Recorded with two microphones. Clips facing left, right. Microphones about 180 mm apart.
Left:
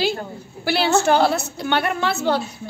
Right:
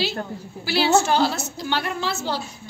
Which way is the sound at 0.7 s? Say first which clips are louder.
Left 2 dB; 60° left (ahead or behind).